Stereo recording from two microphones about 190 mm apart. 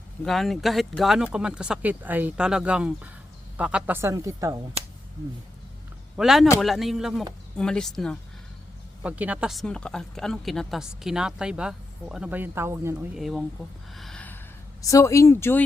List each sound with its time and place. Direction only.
0.3 s speech: centre (ahead or behind); by 4.6 s 15° right (ahead or behind)
6.1 s speech: centre (ahead or behind)
9.0 s speech: 10° right (ahead or behind)
13.1 s speech: centre (ahead or behind)
13.9 s a sound: centre (ahead or behind)
14.8 s speech: 15° left (ahead or behind)